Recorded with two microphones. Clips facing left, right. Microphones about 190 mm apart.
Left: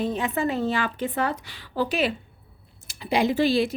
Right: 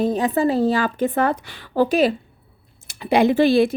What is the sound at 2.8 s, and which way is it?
Speech, 60° right (ahead or behind).